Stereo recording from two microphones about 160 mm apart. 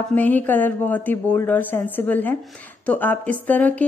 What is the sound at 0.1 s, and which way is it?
A woman's voice, 10° left (ahead or behind).